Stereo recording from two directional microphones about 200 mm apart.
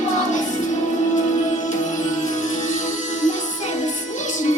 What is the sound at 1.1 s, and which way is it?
Music, 35° left (ahead or behind).